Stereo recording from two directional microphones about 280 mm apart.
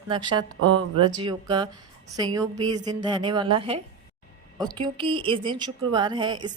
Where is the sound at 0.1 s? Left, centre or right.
Centre.